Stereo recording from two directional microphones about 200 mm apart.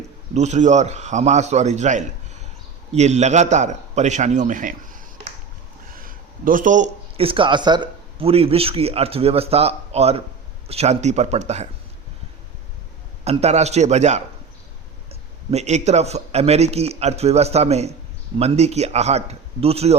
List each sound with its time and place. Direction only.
0.3 s a man's voice: 35° right (ahead or behind)
13.2 s a man's voice: 30° right (ahead or behind)